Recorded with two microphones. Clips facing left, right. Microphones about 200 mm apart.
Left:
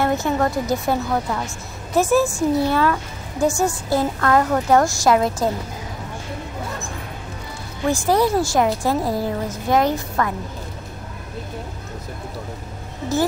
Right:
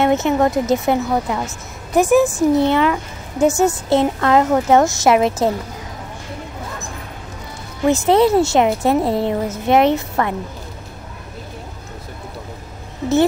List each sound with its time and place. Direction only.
0.0 s a woman's voice: 20° right (ahead or behind)
7.9 s a woman's voice: 25° right (ahead or behind)